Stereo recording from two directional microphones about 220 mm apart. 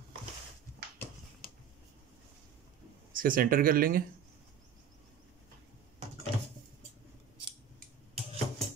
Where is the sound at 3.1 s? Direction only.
40° right (ahead or behind).